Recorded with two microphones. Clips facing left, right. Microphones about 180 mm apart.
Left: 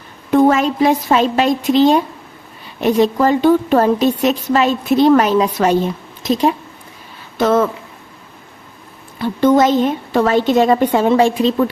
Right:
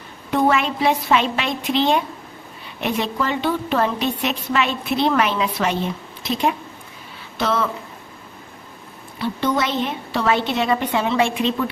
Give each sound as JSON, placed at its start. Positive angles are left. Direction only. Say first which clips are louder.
{"t": 0.3, "sound": "a woman's voice", "louder": "left 7 dB", "side_deg": 40}
{"t": 9.1, "sound": "a woman's voice", "louder": "left 9 dB", "side_deg": 50}